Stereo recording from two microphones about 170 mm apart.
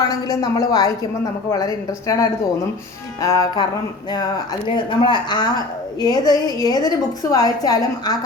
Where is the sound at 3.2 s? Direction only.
20° left (ahead or behind).